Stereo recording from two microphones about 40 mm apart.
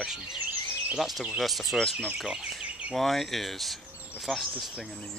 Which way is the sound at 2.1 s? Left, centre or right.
Centre.